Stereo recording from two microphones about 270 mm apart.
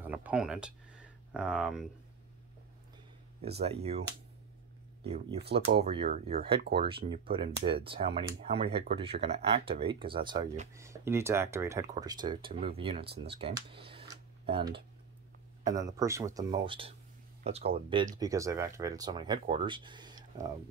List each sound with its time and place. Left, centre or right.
0.0 s speech: centre
3.6 s speech: right
5.0 s speech: right
10.7 s speech: centre
15.8 s speech: centre